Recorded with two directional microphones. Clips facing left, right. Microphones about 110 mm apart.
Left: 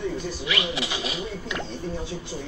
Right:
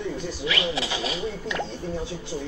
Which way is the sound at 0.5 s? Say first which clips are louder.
Right 1 dB; 30° right (ahead or behind).